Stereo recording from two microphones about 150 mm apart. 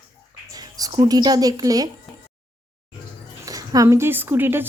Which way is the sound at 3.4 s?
25° right (ahead or behind).